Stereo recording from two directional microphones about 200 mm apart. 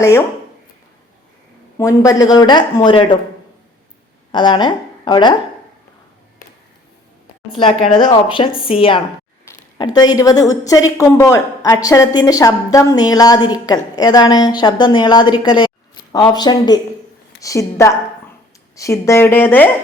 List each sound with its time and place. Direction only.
0.0 s a woman's voice: 15° left (ahead or behind)
1.8 s a woman's voice: 15° left (ahead or behind)
4.3 s a woman's voice: 20° left (ahead or behind)
7.5 s a woman's voice: 25° left (ahead or behind); by 19.7 s 10° left (ahead or behind)